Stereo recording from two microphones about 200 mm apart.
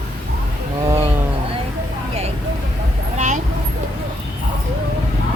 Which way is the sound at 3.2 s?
35° right (ahead or behind).